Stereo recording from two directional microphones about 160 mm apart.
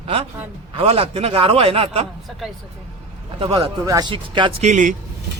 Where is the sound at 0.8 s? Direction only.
40° right (ahead or behind).